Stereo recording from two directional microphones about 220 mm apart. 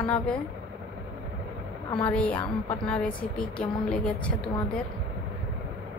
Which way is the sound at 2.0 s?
5° left (ahead or behind).